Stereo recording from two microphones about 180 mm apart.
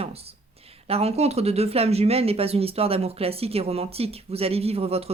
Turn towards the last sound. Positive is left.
turn(degrees=-35)  # may be behind; listen again after turning